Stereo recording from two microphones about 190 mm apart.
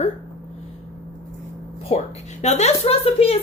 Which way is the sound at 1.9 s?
35° left (ahead or behind).